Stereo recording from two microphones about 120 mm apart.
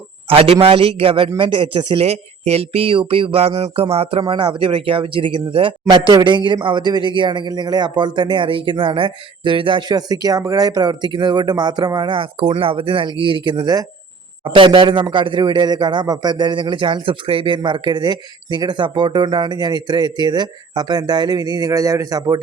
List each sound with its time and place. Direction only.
0.3 s speech: 50° right (ahead or behind)
2.0 s speech: 60° right (ahead or behind)
3.6 s a sound: 55° right (ahead or behind)
4.3 s speech: 45° right (ahead or behind)